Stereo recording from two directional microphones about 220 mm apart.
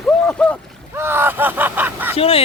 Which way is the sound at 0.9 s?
10° right (ahead or behind).